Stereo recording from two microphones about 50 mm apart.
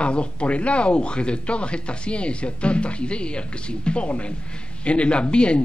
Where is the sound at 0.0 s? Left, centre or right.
Left.